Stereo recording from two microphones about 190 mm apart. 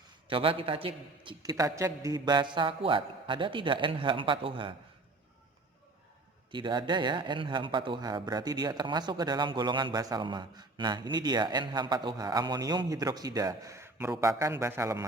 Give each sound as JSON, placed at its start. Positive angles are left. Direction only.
{"t": 0.3, "sound": "a man's voice", "side_deg": -30}
{"t": 6.5, "sound": "a man's voice", "side_deg": -25}